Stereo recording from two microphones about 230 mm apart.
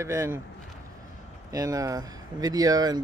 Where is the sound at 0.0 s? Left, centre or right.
Centre.